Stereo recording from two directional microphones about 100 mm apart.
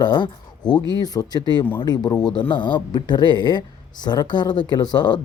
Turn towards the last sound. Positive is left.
turn(degrees=45)  # may be behind; listen again after turning